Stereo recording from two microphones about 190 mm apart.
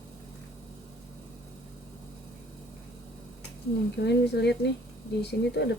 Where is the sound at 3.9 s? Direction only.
65° left (ahead or behind).